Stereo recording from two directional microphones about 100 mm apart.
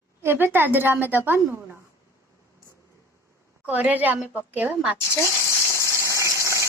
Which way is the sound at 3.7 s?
15° right (ahead or behind).